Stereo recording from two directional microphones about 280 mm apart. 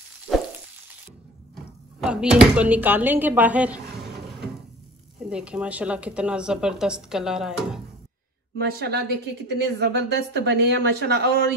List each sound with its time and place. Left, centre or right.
1.5 s speech: centre
5.3 s speech: centre
8.5 s speech: right